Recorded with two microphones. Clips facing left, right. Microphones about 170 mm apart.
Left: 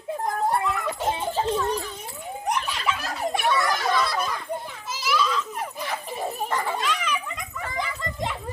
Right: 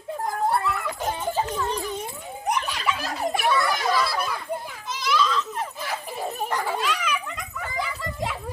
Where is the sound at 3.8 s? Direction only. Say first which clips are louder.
Even; 5° right (ahead or behind).